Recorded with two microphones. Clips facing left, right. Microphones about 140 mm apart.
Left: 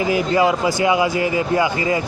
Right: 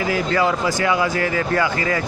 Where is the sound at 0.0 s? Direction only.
20° left (ahead or behind).